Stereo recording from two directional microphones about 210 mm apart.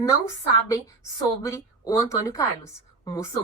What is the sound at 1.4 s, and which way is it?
A woman's voice, 15° left (ahead or behind).